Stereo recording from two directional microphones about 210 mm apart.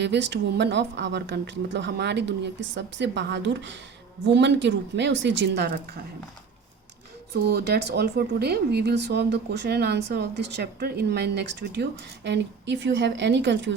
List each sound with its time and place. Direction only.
0.0 s speech: 55° right (ahead or behind)
7.3 s speech: 50° right (ahead or behind)